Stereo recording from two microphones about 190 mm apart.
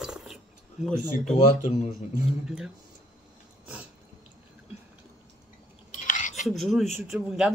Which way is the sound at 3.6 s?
5° right (ahead or behind).